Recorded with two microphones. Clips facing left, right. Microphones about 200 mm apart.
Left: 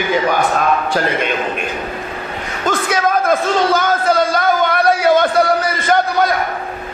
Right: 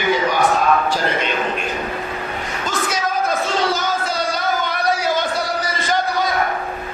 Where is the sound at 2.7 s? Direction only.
55° left (ahead or behind).